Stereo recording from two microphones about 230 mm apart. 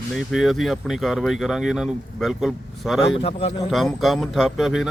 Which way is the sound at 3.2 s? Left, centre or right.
Left.